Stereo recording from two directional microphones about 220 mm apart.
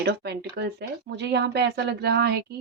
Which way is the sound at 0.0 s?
50° right (ahead or behind).